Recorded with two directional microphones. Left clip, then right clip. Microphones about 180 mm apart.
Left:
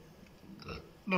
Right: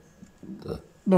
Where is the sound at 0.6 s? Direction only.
90° right.